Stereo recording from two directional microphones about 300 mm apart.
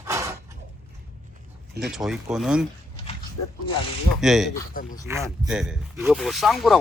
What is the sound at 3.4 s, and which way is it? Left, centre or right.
Speech, left.